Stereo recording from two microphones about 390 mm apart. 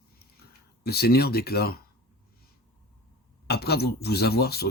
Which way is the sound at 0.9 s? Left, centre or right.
Left.